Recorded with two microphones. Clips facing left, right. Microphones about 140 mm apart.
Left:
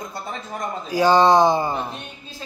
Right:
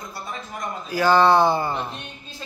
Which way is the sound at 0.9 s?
15° left (ahead or behind).